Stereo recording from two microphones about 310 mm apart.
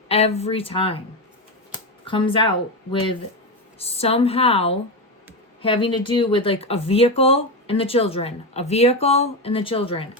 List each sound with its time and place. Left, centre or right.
0.1 s a woman's voice: centre
2.0 s a woman's voice: centre